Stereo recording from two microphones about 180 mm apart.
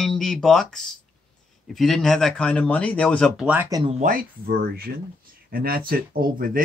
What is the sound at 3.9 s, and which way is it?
Speech, 50° right (ahead or behind).